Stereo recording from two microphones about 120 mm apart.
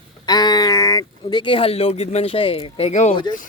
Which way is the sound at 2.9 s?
75° left (ahead or behind).